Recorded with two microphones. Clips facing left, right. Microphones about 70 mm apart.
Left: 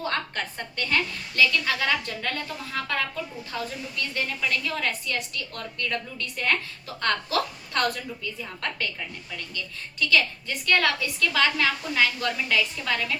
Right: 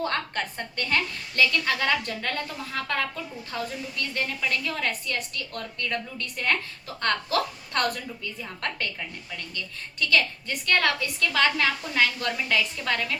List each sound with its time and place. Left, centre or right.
0.0 s a woman's voice: right
10.0 s a woman's voice: right